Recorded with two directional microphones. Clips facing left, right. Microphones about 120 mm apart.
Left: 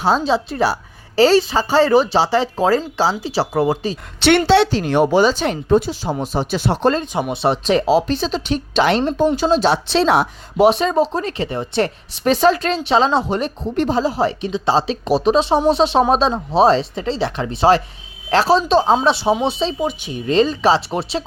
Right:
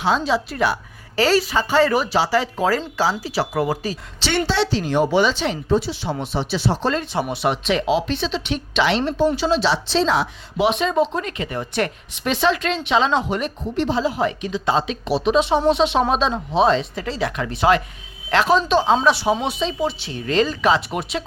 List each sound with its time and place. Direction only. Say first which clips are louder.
0.0 s a woman's voice: left 3 dB; 35° left (ahead or behind)
4.2 s a woman's voice: left 8 dB; 65° left (ahead or behind)
5.1 s speech: left 3 dB; 40° left (ahead or behind)
7.0 s speech: left 2 dB; 15° left (ahead or behind)
7.4 s speech: left 5 dB; 35° left (ahead or behind); by 10.2 s 60° left (ahead or behind)
10.6 s speech: left 4 dB; 40° left (ahead or behind)
13.7 s a woman's voice: left 3 dB; 45° left (ahead or behind)
19.8 s a woman's voice: left 2 dB; 15° left (ahead or behind)